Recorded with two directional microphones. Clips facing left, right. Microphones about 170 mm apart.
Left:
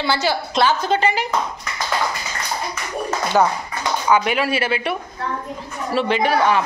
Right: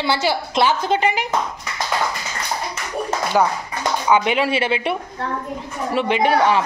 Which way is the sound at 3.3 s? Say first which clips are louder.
Left 1 dB; 10° right (ahead or behind).